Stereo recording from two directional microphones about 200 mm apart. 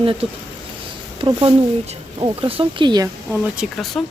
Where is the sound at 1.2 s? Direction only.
15° right (ahead or behind).